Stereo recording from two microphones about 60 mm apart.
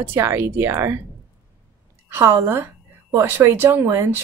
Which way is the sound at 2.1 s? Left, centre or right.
Right.